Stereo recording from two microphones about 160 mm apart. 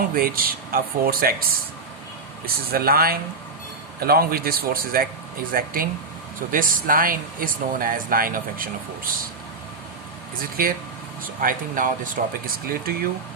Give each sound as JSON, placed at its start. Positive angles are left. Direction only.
{"t": 0.1, "sound": "speech", "side_deg": -65}
{"t": 2.7, "sound": "speech", "side_deg": -70}
{"t": 10.6, "sound": "speech", "side_deg": -65}